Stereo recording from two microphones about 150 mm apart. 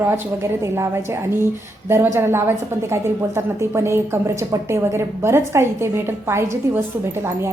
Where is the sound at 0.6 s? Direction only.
15° right (ahead or behind).